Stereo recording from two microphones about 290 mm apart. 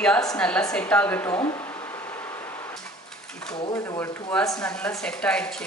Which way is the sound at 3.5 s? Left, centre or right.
Centre.